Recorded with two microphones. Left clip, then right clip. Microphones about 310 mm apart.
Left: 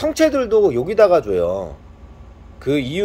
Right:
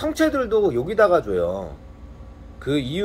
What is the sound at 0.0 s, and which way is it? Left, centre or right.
Speech, left.